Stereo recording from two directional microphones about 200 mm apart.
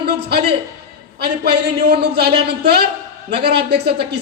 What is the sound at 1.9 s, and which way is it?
A man's voice, 55° right (ahead or behind).